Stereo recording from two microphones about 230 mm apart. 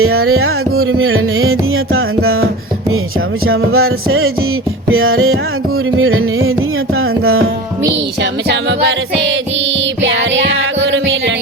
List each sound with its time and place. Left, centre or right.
0.0 s music: right
3.4 s music: right
7.9 s music: right